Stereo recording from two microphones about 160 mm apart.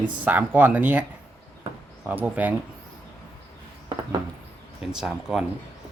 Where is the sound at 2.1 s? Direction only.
10° right (ahead or behind).